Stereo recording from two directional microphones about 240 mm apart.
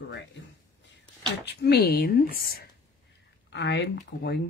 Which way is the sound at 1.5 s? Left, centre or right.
Left.